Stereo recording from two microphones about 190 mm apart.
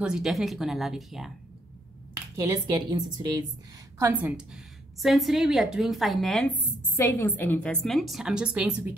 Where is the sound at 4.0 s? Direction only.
10° right (ahead or behind).